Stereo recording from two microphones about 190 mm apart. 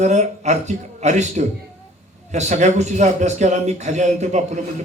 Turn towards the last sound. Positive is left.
turn(degrees=-40)  # may be behind; listen again after turning